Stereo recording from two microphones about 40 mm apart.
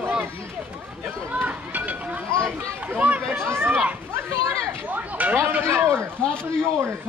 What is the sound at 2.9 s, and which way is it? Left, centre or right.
Speech, right.